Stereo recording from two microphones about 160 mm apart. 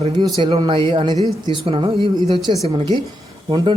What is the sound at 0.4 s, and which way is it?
A man's voice, 30° right (ahead or behind).